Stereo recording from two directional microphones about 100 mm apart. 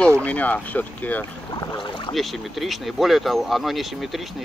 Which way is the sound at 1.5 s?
40° left (ahead or behind).